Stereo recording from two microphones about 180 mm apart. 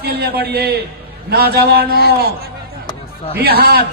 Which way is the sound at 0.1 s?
60° right (ahead or behind).